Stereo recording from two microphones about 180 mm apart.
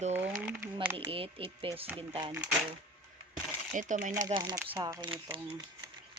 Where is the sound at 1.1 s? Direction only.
30° right (ahead or behind).